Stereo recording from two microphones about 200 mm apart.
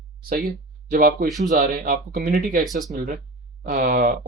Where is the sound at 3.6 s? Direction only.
45° right (ahead or behind).